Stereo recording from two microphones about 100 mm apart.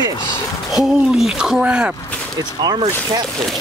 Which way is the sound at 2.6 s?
45° right (ahead or behind).